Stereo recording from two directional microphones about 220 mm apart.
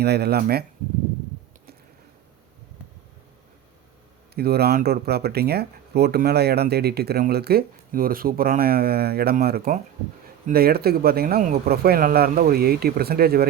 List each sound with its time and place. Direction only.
0.0 s speech: 45° right (ahead or behind)
4.4 s speech: 45° right (ahead or behind)